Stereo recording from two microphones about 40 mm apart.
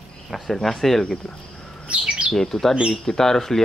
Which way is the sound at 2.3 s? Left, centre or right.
Centre.